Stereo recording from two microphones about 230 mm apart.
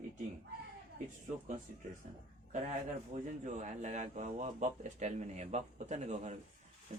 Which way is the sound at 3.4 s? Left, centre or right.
Right.